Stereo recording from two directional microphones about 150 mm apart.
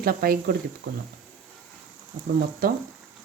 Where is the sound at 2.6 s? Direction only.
75° right (ahead or behind).